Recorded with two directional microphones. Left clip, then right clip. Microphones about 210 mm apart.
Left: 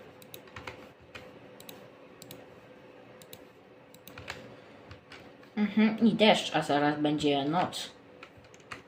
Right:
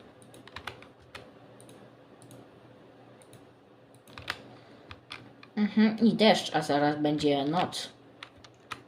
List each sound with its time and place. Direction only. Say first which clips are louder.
5.5 s speech: right 1 dB; 15° right (ahead or behind)